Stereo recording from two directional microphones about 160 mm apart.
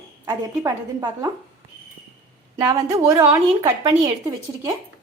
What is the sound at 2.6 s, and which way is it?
A woman's voice, 20° right (ahead or behind).